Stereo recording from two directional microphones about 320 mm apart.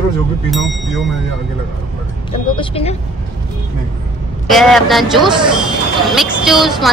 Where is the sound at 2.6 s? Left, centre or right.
Centre.